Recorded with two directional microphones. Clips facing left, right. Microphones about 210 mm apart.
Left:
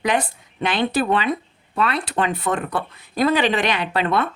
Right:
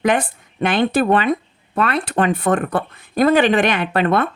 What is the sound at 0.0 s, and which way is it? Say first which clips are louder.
Speech: right 4 dB; 50° right (ahead or behind).